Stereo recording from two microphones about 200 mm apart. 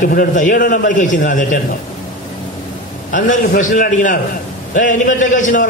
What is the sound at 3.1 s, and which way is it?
A man's voice, 40° left (ahead or behind).